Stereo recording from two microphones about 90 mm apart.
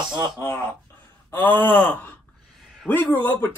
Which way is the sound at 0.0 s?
55° right (ahead or behind).